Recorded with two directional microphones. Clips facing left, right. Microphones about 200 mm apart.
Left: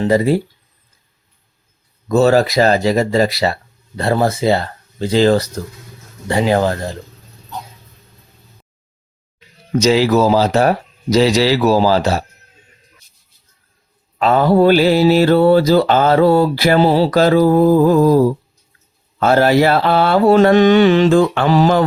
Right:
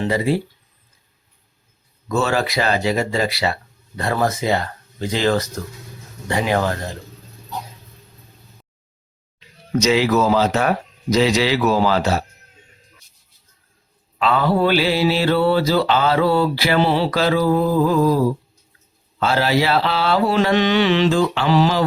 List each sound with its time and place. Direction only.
0.0 s speech: 40° left (ahead or behind)
2.0 s speech: 40° left (ahead or behind)
9.8 s speech: 35° left (ahead or behind)
14.2 s mantra: 45° left (ahead or behind)
19.2 s mantra: 50° left (ahead or behind)